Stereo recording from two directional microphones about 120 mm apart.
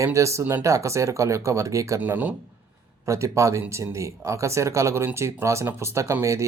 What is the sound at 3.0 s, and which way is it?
Speech, 25° right (ahead or behind).